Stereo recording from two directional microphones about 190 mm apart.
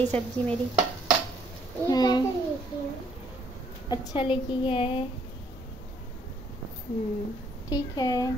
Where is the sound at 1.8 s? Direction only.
20° left (ahead or behind).